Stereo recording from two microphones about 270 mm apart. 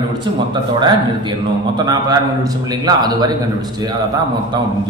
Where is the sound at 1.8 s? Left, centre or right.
Centre.